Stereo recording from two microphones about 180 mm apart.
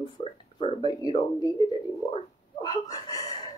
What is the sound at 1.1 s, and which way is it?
Speech, 25° left (ahead or behind).